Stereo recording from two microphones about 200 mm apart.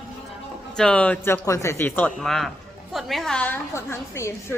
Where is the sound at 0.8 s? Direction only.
5° left (ahead or behind).